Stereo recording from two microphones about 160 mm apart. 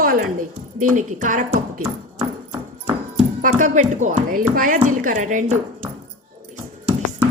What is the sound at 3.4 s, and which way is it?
A woman's voice, 55° right (ahead or behind).